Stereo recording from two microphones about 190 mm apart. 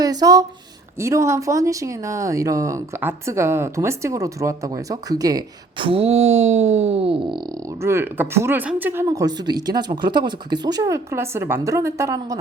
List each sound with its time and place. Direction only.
0.0 s speech: 20° right (ahead or behind)
6.1 s speech: 90° right
6.7 s wail: 35° right (ahead or behind)
7.8 s speech: 15° right (ahead or behind)